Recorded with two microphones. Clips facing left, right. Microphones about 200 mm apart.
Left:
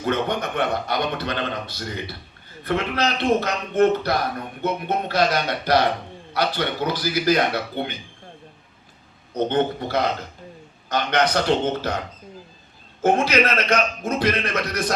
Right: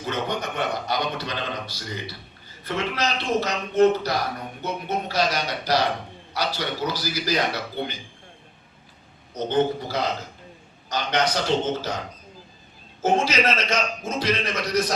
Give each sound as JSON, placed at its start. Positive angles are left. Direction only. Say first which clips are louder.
{"t": 0.0, "sound": "a man's voice", "louder": "left 4 dB", "side_deg": 55}
{"t": 9.3, "sound": "a man's voice", "louder": "left 1 dB", "side_deg": 60}
{"t": 13.0, "sound": "a man's voice", "louder": "left 3 dB", "side_deg": 60}